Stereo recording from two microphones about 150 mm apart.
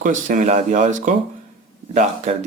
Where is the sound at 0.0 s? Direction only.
55° right (ahead or behind).